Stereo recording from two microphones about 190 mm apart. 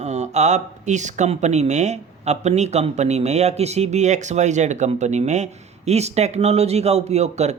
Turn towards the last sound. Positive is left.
turn(degrees=-35)  # may be behind; listen again after turning